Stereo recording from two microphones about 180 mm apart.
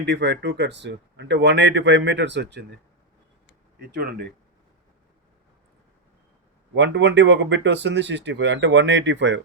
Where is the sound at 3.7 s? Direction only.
60° right (ahead or behind).